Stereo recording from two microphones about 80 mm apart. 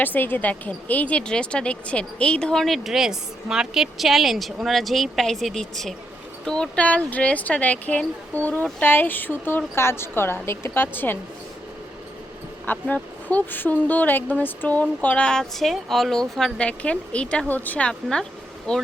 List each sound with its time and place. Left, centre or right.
0.0 s speech: left
12.6 s speech: left